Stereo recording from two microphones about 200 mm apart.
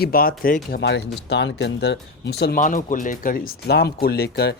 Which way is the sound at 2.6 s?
40° left (ahead or behind).